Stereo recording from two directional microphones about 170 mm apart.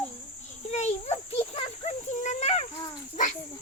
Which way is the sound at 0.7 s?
40° left (ahead or behind).